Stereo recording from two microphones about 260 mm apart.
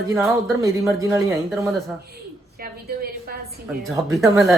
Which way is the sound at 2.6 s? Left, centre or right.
Right.